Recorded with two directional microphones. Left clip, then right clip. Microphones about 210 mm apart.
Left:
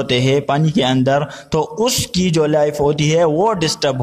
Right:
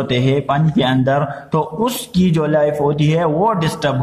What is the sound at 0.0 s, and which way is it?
A man's voice, 45° left (ahead or behind).